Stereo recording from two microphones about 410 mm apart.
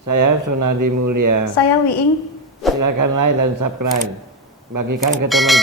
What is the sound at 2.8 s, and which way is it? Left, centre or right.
A man's voice, right.